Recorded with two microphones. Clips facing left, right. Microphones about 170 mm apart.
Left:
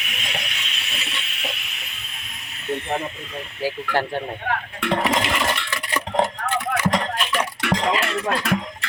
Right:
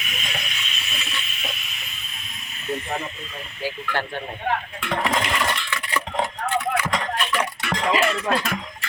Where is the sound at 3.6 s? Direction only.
40° left (ahead or behind).